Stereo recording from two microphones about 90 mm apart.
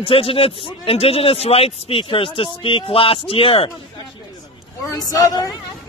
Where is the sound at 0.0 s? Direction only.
90° left.